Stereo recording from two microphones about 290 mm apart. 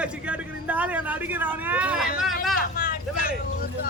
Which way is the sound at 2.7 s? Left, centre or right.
Left.